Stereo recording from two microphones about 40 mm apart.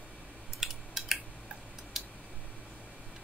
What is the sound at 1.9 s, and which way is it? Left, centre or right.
Tick-tock, centre.